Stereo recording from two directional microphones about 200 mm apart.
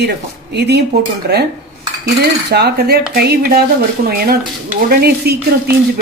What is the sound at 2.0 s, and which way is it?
Cutlery, 55° right (ahead or behind).